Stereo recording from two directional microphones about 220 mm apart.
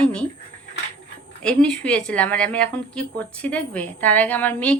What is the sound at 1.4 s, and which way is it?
A woman's voice, 5° left (ahead or behind).